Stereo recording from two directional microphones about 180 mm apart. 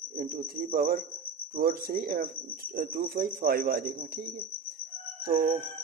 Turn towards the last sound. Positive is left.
turn(degrees=-50)  # may be behind; listen again after turning